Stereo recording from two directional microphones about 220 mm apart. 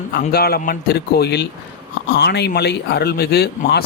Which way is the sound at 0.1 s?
45° left (ahead or behind).